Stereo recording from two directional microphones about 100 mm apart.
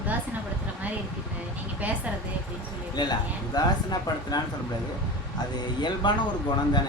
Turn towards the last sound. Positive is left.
turn(degrees=50)  # may be behind; listen again after turning